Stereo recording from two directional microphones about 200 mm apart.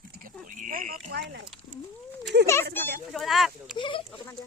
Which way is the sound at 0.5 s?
40° right (ahead or behind).